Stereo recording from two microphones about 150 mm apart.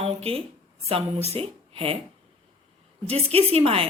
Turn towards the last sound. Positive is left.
turn(degrees=-40)  # may be behind; listen again after turning